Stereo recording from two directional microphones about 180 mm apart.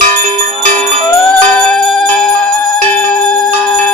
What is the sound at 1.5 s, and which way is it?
Music, 5° left (ahead or behind).